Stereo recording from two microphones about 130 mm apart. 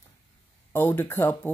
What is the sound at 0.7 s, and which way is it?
Speech, 15° left (ahead or behind).